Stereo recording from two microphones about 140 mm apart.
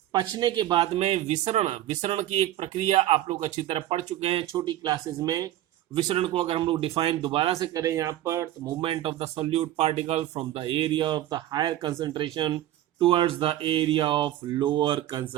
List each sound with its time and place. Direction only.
0.1 s speech: 30° right (ahead or behind)
0.9 s speech: 50° right (ahead or behind)
7.6 s speech: 25° right (ahead or behind)
8.8 s speech: 40° right (ahead or behind)